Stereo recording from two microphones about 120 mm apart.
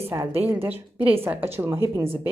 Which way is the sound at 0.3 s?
15° right (ahead or behind).